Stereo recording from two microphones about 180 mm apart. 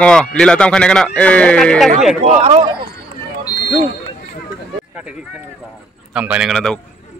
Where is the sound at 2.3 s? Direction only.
35° right (ahead or behind).